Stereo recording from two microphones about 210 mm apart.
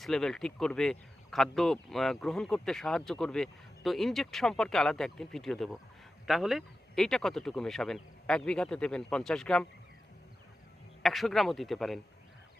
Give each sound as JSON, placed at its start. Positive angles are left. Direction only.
{"t": 0.0, "sound": "speech", "side_deg": 5}
{"t": 11.0, "sound": "speech", "side_deg": 0}